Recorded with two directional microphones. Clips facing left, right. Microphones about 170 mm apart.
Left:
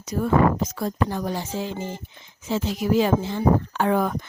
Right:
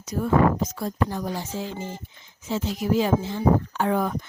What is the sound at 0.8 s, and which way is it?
Speech, 75° left (ahead or behind).